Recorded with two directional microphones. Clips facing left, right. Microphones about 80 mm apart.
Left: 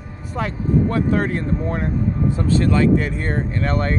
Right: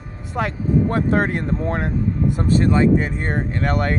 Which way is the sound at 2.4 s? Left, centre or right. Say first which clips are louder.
Right 1 dB; right.